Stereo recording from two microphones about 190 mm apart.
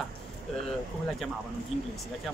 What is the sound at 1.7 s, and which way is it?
Speech, 35° left (ahead or behind).